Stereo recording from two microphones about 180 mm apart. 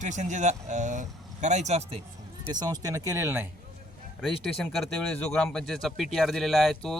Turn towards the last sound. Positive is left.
turn(degrees=0)  # may be behind; listen again after turning